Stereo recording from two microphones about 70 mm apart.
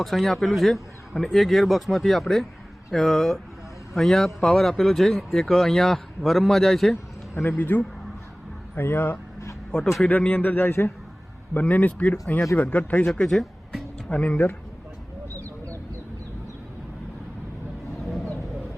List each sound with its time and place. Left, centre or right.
0.0 s speech: centre
6.9 s a sound: left
7.6 s a man's voice: left
9.7 s a man's voice: centre; by 10.9 s left
11.5 s a man's voice: left
13.1 s speech: centre
14.1 s a man's voice: left
18.0 s vehicle: centre